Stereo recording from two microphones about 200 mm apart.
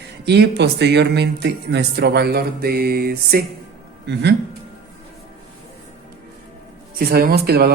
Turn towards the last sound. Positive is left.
turn(degrees=-50)  # may be behind; listen again after turning